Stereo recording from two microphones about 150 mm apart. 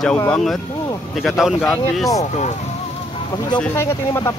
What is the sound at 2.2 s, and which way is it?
Speech, 50° left (ahead or behind).